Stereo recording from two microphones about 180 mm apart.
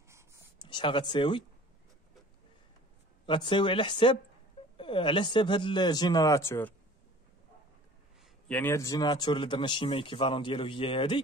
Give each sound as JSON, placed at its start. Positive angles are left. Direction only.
{"t": 0.6, "sound": "speech", "side_deg": 25}
{"t": 3.3, "sound": "a man's voice", "side_deg": 25}
{"t": 8.2, "sound": "a man's voice", "side_deg": 5}